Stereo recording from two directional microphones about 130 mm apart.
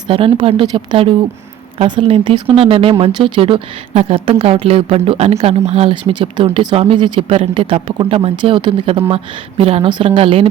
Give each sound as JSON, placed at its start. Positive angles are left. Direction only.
{"t": 0.1, "sound": "a woman's voice", "side_deg": -45}